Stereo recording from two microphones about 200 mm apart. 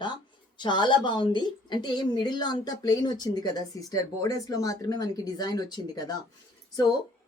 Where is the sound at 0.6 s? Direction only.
20° left (ahead or behind).